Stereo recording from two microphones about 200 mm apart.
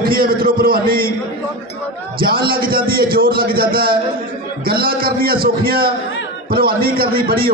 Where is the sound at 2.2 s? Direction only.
45° right (ahead or behind).